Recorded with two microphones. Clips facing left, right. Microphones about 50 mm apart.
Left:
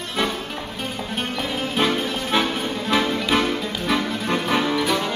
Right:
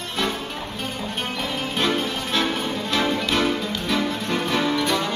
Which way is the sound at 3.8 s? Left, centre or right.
Centre.